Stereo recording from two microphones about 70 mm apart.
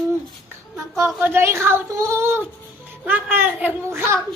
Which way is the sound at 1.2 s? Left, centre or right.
Right.